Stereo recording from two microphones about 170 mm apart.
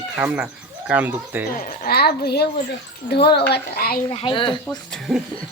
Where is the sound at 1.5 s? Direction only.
55° left (ahead or behind).